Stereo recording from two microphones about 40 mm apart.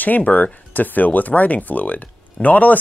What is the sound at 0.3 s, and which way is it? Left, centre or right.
Speech, left.